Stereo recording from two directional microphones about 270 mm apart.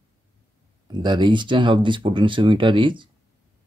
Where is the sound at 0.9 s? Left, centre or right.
Centre.